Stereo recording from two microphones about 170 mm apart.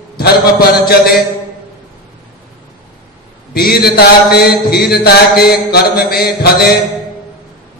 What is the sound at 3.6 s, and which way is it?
Mantra, 65° left (ahead or behind).